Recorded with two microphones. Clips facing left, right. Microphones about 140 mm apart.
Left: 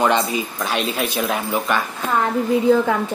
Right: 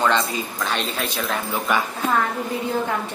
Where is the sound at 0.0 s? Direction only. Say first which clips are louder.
Left 3 dB; 15° left (ahead or behind).